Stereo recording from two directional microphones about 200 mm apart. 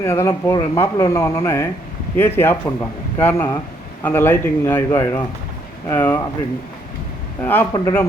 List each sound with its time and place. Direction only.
0.0 s speech: 15° left (ahead or behind)
7.4 s speech: 10° left (ahead or behind)